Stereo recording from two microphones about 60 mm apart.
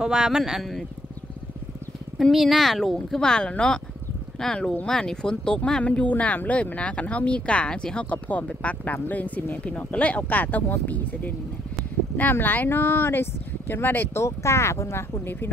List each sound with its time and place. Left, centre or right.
0.0 s speech: centre
2.3 s speech: centre
3.2 s speech: centre
4.8 s speech: centre; by 14.2 s left
14.2 s speech: left